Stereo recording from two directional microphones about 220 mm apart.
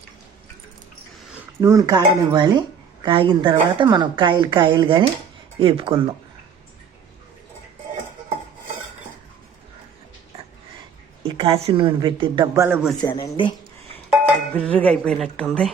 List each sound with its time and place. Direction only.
1.3 s speech: 10° right (ahead or behind)
11.2 s speech: 25° right (ahead or behind)
12.6 s a man's voice: 5° right (ahead or behind)
13.0 s speech: 20° left (ahead or behind)
14.1 s speech: 5° left (ahead or behind)